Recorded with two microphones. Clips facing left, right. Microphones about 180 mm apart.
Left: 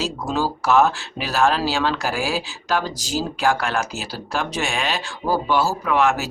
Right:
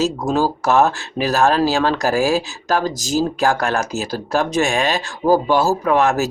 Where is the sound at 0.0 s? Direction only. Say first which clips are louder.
Right 6 dB; 45° right (ahead or behind).